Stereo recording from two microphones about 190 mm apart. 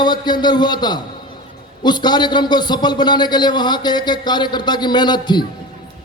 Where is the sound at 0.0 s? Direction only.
20° left (ahead or behind).